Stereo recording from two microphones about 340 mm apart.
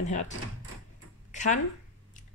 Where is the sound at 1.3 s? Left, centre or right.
Left.